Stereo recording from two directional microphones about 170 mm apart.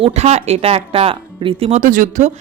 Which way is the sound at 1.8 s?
50° right (ahead or behind).